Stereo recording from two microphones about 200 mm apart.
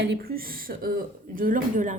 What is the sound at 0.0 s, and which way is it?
Speech, 55° right (ahead or behind).